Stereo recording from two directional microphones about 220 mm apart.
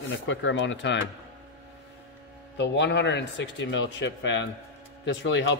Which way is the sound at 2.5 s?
55° left (ahead or behind).